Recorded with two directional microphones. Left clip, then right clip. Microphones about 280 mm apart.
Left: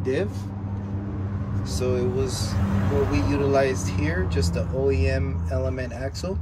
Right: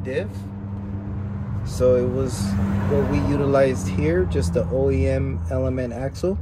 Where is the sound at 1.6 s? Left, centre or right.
Centre.